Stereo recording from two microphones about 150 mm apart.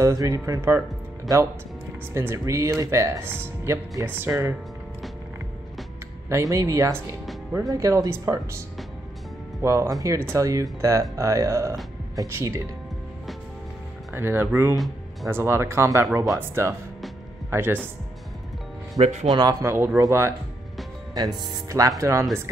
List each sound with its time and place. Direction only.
0.0 s speech: 20° right (ahead or behind)
2.1 s speech: 20° right (ahead or behind)
6.2 s speech: 20° right (ahead or behind)
14.1 s speech: 15° right (ahead or behind)
18.9 s speech: 50° right (ahead or behind)
19.3 s speech: 25° right (ahead or behind)